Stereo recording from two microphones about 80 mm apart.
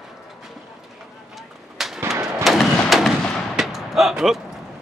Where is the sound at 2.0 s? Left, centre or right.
Right.